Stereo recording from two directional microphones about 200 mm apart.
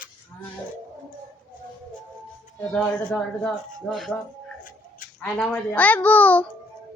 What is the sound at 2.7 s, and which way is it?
Speech, 5° left (ahead or behind).